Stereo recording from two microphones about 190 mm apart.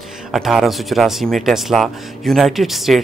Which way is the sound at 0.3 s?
Centre (ahead or behind).